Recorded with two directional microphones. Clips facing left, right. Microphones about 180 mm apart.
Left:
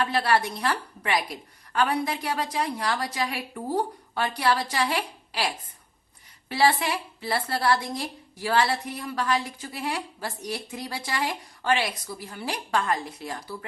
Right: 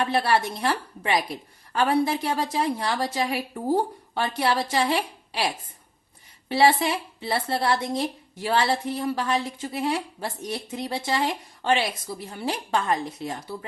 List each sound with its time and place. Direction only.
0.0 s a woman's voice: 25° right (ahead or behind)